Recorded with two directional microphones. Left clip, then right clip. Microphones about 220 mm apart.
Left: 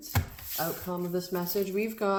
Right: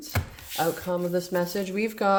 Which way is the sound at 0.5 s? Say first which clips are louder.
Right 7 dB; 50° right (ahead or behind).